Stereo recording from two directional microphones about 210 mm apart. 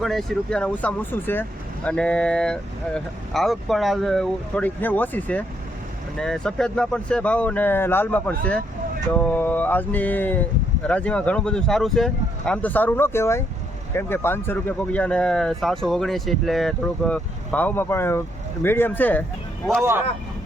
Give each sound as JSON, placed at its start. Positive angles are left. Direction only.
{"t": 0.0, "sound": "speech", "side_deg": 0}
{"t": 9.1, "sound": "mantra", "side_deg": 10}
{"t": 10.8, "sound": "speech", "side_deg": 5}
{"t": 18.6, "sound": "mantra", "side_deg": 10}